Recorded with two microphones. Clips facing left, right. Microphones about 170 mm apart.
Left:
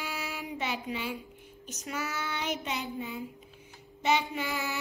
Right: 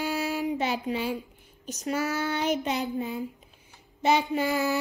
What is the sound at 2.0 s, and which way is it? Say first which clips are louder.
Child singing: right 7 dB; 50° right (ahead or behind).